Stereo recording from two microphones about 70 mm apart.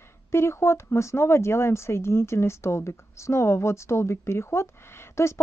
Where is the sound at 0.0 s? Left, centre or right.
Left.